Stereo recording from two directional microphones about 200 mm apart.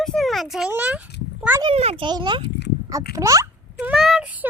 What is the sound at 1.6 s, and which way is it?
A child's voice, 30° right (ahead or behind).